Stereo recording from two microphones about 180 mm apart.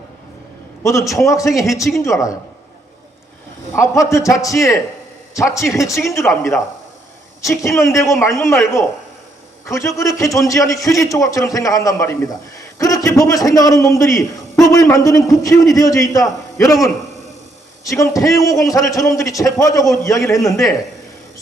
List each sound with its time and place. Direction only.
0.8 s a man's voice: 15° left (ahead or behind)
3.8 s a man's voice: 15° left (ahead or behind)
17.8 s a man's voice: 15° left (ahead or behind)